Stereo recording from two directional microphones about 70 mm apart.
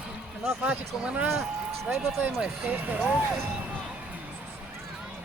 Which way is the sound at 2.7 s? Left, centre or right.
Right.